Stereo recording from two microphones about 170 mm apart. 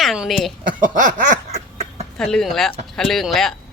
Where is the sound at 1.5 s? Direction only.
40° right (ahead or behind).